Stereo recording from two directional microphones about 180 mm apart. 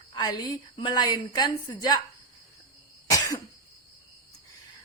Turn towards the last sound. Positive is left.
turn(degrees=20)  # may be behind; listen again after turning